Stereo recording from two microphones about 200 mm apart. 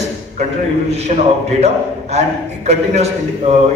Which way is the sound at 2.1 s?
35° right (ahead or behind).